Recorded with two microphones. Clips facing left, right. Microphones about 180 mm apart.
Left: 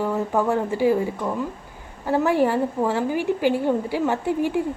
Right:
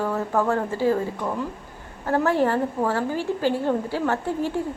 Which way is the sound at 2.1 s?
15° left (ahead or behind).